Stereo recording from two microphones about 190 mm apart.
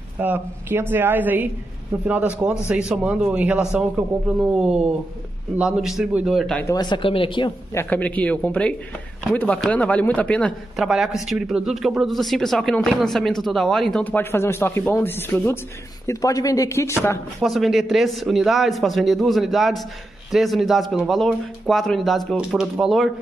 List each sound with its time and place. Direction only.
0.2 s speech: 10° right (ahead or behind)
6.7 s speech: 25° left (ahead or behind)
7.7 s speech: 10° left (ahead or behind)
17.4 s speech: centre (ahead or behind)